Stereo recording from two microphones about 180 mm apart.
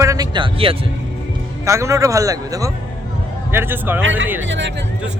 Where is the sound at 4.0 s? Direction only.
90° right.